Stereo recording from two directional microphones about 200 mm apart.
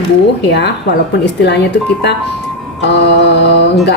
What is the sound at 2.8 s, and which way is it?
Speech, 60° left (ahead or behind).